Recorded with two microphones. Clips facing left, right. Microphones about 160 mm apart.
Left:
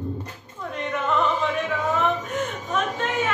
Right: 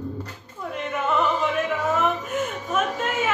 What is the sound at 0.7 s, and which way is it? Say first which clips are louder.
Music: even; 5° right (ahead or behind).